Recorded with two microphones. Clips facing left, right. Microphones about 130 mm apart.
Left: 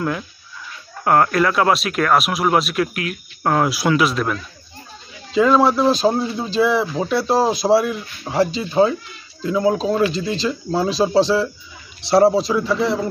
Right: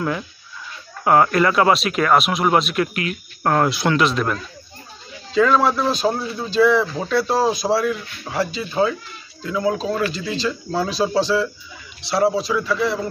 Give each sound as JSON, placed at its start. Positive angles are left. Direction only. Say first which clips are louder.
{"t": 1.0, "sound": "speech", "louder": "even", "side_deg": 0}
{"t": 5.3, "sound": "speech", "louder": "left 2 dB", "side_deg": 20}